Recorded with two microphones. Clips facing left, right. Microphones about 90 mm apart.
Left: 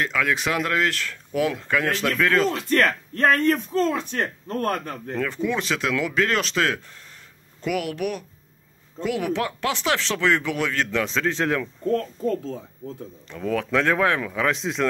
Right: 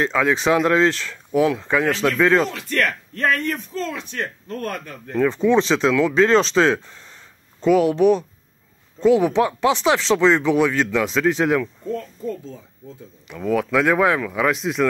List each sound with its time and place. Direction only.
0.0 s speech: 25° right (ahead or behind)
2.5 s speech: 40° left (ahead or behind)
5.2 s speech: 25° right (ahead or behind)
11.9 s speech: 75° left (ahead or behind)
13.3 s speech: 10° right (ahead or behind)